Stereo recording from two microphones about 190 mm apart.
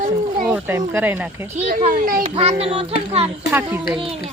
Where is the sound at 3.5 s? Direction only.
10° right (ahead or behind).